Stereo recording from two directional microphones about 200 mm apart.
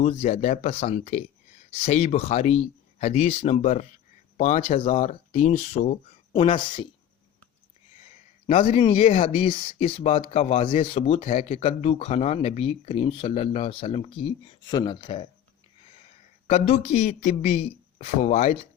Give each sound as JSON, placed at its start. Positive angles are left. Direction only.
{"t": 0.0, "sound": "speech", "side_deg": 35}
{"t": 8.4, "sound": "speech", "side_deg": 30}
{"t": 16.5, "sound": "speech", "side_deg": 35}